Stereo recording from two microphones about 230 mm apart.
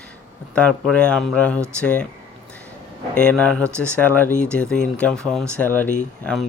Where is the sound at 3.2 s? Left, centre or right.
Centre.